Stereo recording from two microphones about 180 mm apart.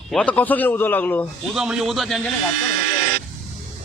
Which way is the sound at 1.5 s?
5° right (ahead or behind).